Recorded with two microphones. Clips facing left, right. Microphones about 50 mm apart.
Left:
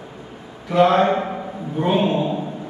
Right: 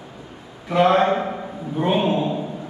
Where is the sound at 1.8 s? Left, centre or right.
Centre.